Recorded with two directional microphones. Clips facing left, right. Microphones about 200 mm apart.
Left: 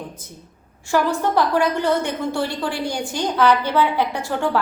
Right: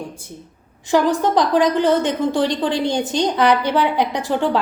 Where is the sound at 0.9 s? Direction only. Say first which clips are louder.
Right 3 dB; 15° right (ahead or behind).